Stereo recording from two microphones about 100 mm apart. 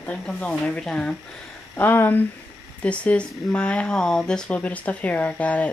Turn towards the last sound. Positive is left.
turn(degrees=15)  # may be behind; listen again after turning